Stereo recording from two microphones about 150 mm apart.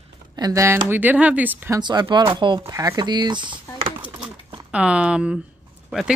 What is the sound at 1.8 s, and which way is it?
Speech, 30° right (ahead or behind).